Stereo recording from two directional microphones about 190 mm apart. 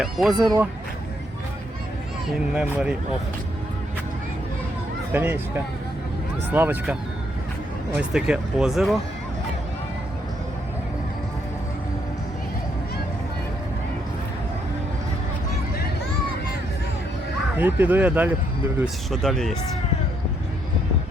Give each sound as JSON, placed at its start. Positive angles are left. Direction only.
{"t": 0.0, "sound": "speech", "side_deg": 0}
{"t": 2.2, "sound": "speech", "side_deg": -5}
{"t": 5.1, "sound": "speech", "side_deg": -10}
{"t": 6.5, "sound": "speech", "side_deg": -10}
{"t": 7.9, "sound": "speech", "side_deg": -5}
{"t": 17.6, "sound": "speech", "side_deg": -10}
{"t": 19.1, "sound": "speech", "side_deg": 0}